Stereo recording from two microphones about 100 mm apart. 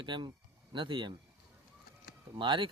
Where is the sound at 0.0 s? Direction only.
50° right (ahead or behind).